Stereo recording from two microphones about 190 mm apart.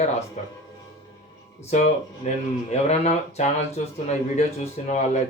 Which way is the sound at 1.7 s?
35° left (ahead or behind).